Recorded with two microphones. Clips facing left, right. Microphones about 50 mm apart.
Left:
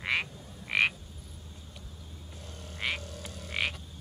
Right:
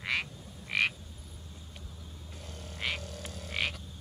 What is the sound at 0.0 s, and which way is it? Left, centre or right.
Frog, left.